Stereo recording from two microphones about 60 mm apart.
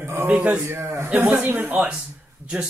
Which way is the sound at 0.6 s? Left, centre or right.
Right.